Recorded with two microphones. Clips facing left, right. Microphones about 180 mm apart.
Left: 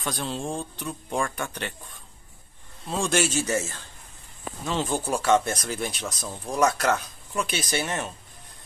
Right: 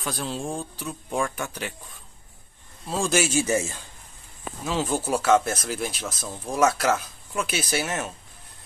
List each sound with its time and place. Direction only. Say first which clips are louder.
0.0 s speech: even; 5° right (ahead or behind)
2.9 s a man's voice: right 1 dB; 5° right (ahead or behind)